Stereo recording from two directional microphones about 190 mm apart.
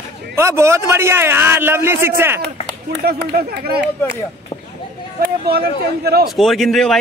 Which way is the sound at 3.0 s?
55° right (ahead or behind).